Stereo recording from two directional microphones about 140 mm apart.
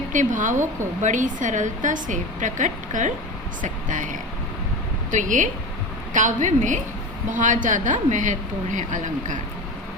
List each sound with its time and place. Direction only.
0.1 s a woman's voice: 65° right (ahead or behind)